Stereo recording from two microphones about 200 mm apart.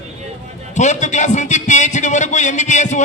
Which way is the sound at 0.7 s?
35° left (ahead or behind).